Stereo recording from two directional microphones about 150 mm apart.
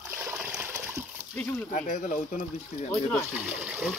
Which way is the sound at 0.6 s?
15° right (ahead or behind).